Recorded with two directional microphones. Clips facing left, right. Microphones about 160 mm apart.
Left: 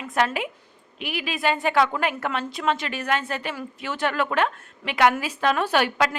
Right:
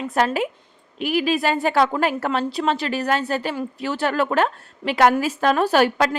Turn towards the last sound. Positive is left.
turn(degrees=-40)  # may be behind; listen again after turning